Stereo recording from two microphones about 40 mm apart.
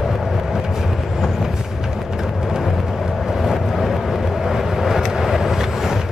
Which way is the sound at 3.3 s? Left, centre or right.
Centre.